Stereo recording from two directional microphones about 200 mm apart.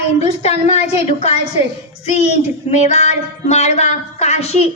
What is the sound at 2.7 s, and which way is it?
Speech, 35° left (ahead or behind).